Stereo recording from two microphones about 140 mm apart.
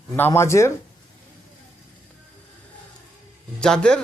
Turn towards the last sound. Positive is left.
turn(degrees=5)  # may be behind; listen again after turning